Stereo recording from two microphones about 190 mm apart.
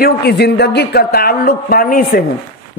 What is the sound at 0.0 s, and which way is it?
A woman's voice, 60° left (ahead or behind).